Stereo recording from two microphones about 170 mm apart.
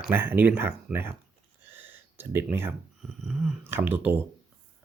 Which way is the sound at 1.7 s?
10° right (ahead or behind).